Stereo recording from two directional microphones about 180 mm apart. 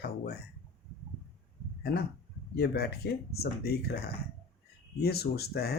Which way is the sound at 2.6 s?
60° left (ahead or behind).